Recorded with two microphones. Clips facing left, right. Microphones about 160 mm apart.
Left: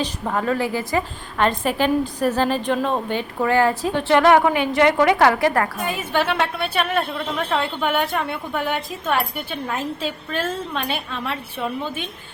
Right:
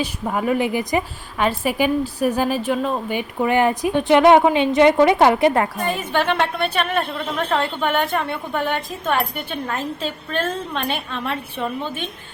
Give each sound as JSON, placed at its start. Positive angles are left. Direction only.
{"t": 0.0, "sound": "a woman's voice", "side_deg": -10}
{"t": 3.2, "sound": "a woman's voice", "side_deg": -15}
{"t": 5.8, "sound": "a woman's voice", "side_deg": 5}